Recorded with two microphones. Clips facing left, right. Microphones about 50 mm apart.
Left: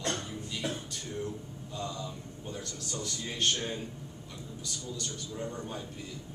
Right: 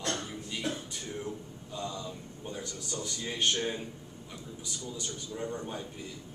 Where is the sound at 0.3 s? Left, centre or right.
Centre.